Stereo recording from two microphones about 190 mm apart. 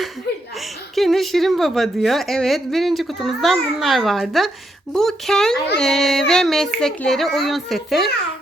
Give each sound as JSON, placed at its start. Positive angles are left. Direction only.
{"t": 0.3, "sound": "laughter", "side_deg": 60}
{"t": 0.9, "sound": "a woman's voice", "side_deg": 0}